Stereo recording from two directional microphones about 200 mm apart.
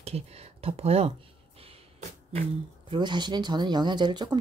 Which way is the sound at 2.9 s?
20° right (ahead or behind).